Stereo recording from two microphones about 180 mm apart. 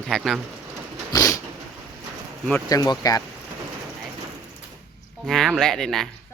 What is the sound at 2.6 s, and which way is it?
Speech, 20° left (ahead or behind).